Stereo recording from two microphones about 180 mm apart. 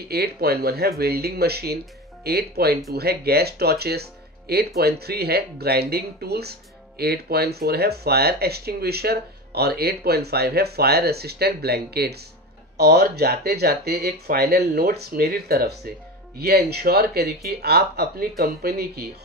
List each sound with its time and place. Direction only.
0.1 s speech: 60° right (ahead or behind)